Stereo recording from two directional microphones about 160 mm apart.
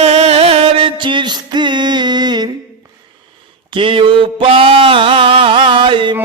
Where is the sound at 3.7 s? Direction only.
30° right (ahead or behind).